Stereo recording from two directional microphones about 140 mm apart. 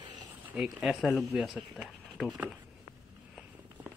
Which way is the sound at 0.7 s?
Centre (ahead or behind).